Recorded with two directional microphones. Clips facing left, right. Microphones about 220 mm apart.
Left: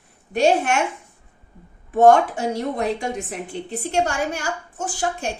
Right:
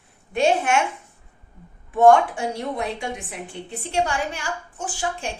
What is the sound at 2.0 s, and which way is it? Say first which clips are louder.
A woman's voice: left 1 dB; 40° left (ahead or behind).